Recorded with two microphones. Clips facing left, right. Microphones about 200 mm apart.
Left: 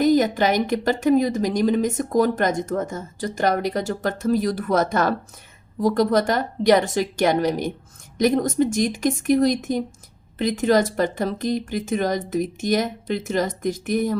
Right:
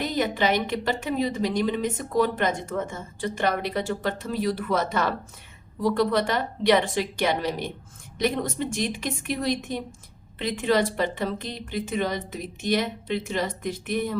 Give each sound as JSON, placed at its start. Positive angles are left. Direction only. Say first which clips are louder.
{"t": 0.0, "sound": "a woman's voice", "louder": "left 7 dB", "side_deg": 45}